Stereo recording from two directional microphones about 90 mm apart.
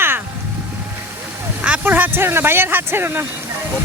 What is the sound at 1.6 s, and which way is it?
Speech, 15° right (ahead or behind).